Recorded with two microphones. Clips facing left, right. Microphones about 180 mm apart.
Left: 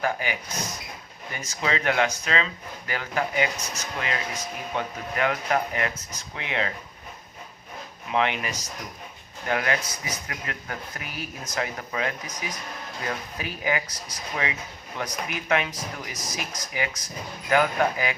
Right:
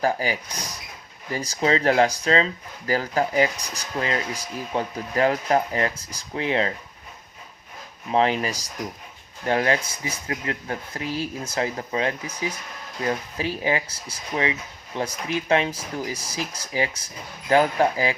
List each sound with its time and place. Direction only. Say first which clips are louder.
0.0 s speech: right 4 dB; 35° right (ahead or behind)
8.1 s speech: right 4 dB; 35° right (ahead or behind)